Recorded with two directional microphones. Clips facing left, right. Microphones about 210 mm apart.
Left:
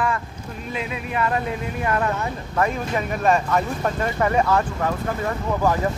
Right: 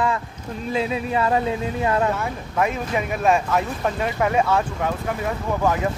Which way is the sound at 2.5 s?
5° right (ahead or behind).